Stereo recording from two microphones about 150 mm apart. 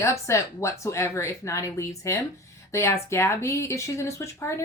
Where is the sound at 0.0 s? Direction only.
20° left (ahead or behind).